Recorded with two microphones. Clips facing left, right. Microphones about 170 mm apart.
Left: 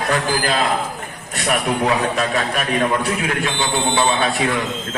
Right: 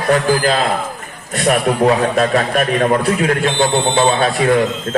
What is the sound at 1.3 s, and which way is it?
A man's voice, 45° right (ahead or behind).